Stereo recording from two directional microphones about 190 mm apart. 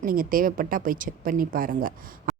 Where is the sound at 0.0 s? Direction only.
50° right (ahead or behind).